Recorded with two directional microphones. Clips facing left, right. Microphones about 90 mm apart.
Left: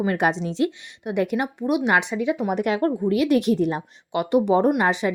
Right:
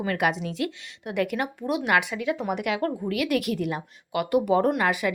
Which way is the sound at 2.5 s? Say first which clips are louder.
Left 5 dB; 35° left (ahead or behind).